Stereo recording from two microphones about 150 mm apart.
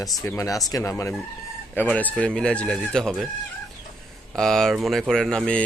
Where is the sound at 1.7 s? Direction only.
10° left (ahead or behind).